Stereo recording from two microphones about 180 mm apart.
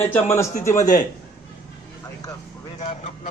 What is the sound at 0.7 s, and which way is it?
Speech, 45° left (ahead or behind).